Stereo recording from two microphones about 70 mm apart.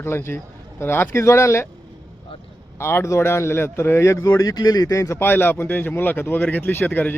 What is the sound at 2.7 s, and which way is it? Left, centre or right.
Speech, left.